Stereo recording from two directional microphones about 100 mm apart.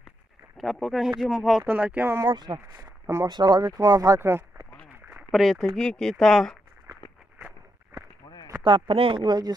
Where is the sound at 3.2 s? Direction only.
45° right (ahead or behind).